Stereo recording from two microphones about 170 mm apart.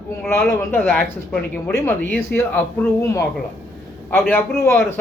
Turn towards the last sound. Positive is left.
turn(degrees=15)  # may be behind; listen again after turning